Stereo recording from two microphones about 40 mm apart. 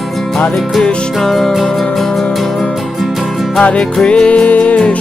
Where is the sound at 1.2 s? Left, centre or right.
Centre.